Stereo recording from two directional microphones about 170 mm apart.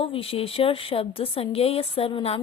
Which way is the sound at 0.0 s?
35° left (ahead or behind).